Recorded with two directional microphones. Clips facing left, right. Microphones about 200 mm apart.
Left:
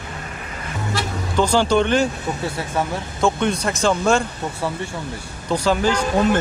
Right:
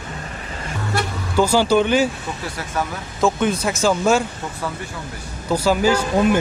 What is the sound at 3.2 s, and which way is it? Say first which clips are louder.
Speech: right 1 dB; 5° right (ahead or behind).